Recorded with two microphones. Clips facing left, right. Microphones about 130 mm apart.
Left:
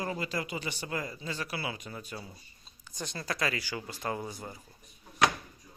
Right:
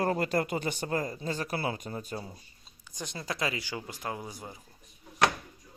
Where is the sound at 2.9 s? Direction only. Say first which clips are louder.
Even; 15° right (ahead or behind).